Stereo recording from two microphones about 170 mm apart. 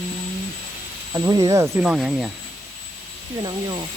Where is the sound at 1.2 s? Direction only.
20° right (ahead or behind).